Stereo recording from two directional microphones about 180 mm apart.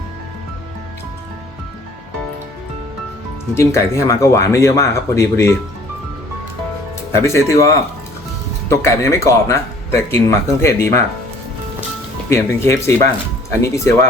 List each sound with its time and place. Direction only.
3.5 s speech: 15° left (ahead or behind)
7.2 s speech: 15° left (ahead or behind)
12.3 s speech: 15° left (ahead or behind)